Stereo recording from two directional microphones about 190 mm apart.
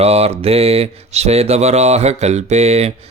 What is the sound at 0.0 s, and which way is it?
Mantra, 35° right (ahead or behind).